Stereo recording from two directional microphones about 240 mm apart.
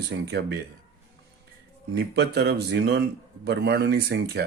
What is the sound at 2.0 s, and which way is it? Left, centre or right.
Speech, right.